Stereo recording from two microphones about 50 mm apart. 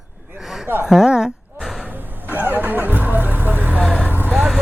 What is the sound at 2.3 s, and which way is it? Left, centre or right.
Vehicle, right.